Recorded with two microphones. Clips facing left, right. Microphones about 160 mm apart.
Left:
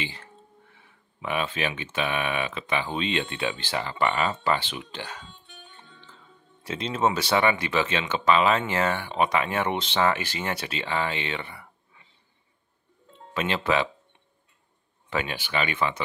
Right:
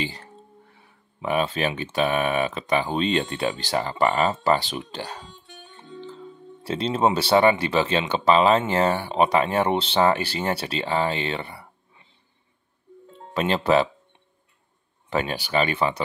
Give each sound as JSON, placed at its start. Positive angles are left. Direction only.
{"t": 0.0, "sound": "music", "side_deg": -35}
{"t": 0.7, "sound": "speech", "side_deg": -40}
{"t": 6.6, "sound": "speech", "side_deg": -35}
{"t": 13.3, "sound": "speech", "side_deg": -35}
{"t": 15.0, "sound": "speech", "side_deg": -35}